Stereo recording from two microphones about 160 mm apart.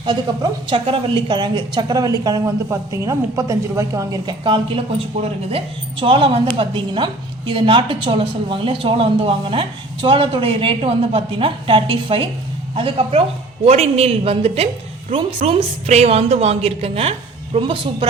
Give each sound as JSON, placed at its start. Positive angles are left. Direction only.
{"t": 0.7, "sound": "a woman's voice", "side_deg": -30}